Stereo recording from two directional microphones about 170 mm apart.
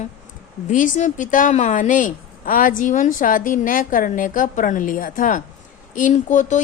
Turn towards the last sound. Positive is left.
turn(degrees=50)  # may be behind; listen again after turning